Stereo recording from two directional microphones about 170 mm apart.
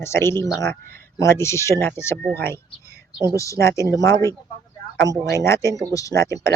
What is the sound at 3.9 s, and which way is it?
Speech, 20° left (ahead or behind).